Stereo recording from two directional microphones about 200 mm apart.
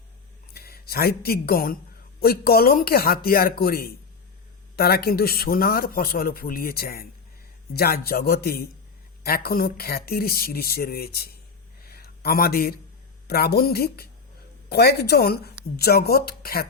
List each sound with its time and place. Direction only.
0.5 s a man's voice: 50° left (ahead or behind)
11.9 s a sound: 50° left (ahead or behind)
13.2 s a man's voice: 50° left (ahead or behind)